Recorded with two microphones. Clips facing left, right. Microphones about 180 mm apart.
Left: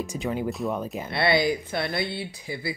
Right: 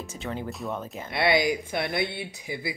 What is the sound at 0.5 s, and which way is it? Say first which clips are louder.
Speech: left 5 dB; centre (ahead or behind).